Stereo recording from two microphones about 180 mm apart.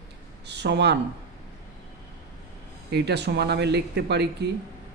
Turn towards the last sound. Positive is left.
turn(degrees=-70)  # may be behind; listen again after turning